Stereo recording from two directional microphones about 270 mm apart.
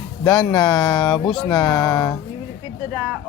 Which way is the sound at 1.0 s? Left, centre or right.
Centre.